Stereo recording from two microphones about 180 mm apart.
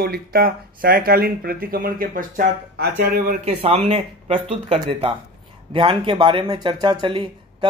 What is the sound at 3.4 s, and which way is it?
Speech, 35° right (ahead or behind).